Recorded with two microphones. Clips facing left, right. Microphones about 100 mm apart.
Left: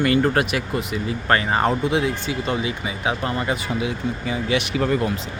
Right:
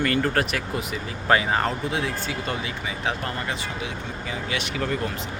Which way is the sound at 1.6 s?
15° left (ahead or behind).